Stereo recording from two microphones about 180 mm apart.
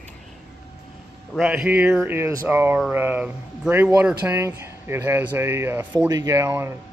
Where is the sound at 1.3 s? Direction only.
5° right (ahead or behind).